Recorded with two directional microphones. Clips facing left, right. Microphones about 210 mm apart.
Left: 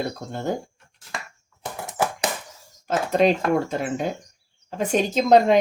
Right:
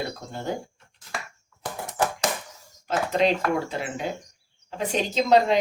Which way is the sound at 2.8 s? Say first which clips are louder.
Left 3 dB; 45° left (ahead or behind).